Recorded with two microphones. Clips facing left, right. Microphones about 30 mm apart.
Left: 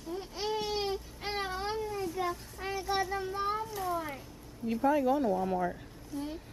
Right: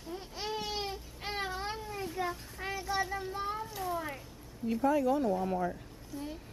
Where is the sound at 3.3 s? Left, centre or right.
Centre.